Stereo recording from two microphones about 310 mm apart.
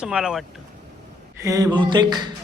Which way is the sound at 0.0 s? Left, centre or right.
Centre.